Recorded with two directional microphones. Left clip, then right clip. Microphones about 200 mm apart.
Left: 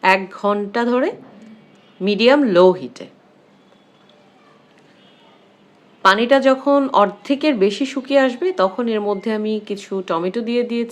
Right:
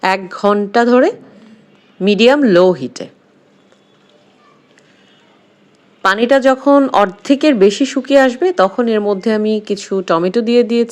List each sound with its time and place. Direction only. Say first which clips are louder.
0.0 s speech: right 2 dB; 35° right (ahead or behind)
6.0 s speech: right 2 dB; 30° right (ahead or behind)